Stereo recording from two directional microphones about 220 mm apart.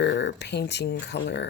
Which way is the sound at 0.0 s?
55° left (ahead or behind).